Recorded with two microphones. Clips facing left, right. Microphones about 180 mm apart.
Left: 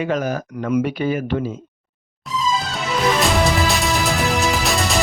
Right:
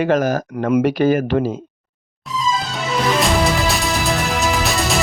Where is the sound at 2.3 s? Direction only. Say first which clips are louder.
Even; centre (ahead or behind).